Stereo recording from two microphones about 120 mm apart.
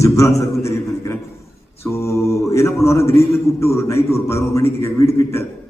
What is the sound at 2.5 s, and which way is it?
A man's voice, 25° left (ahead or behind).